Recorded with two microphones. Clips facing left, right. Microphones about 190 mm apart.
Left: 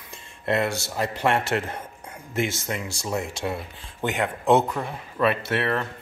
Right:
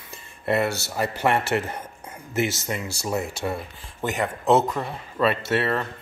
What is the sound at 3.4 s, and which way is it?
Speech, centre (ahead or behind).